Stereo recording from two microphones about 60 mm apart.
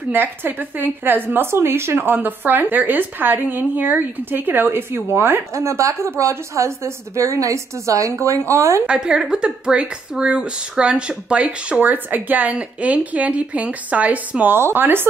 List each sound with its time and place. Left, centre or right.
0.1 s a woman's voice: right
2.1 s a woman's voice: right
5.5 s a woman's voice: right
8.8 s speech: centre
14.6 s a woman's voice: right